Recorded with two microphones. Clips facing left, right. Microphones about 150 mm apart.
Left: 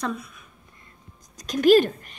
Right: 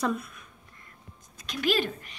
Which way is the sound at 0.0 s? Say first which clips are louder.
Right 1 dB; 5° right (ahead or behind).